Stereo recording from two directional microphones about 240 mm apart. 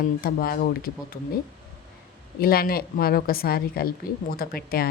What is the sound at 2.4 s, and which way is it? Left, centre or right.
A woman's voice, left.